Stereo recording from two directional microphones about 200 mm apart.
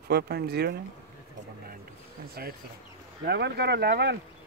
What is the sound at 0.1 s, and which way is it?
Speech, 55° right (ahead or behind).